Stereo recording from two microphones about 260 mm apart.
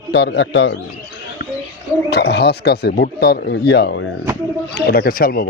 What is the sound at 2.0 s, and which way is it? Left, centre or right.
Speech, left.